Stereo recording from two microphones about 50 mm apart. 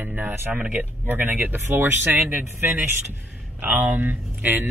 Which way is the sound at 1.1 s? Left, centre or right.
Right.